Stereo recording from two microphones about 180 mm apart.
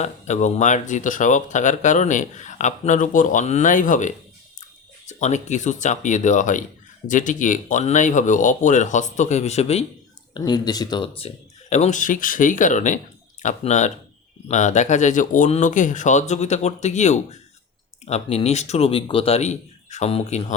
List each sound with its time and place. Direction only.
0.0 s speech: 40° left (ahead or behind)
10.3 s speech: 25° left (ahead or behind)